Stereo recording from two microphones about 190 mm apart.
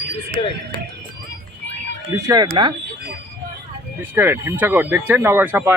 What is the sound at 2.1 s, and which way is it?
Speech, 20° right (ahead or behind).